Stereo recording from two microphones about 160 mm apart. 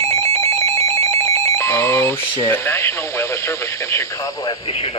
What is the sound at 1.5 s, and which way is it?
Speech, 15° left (ahead or behind).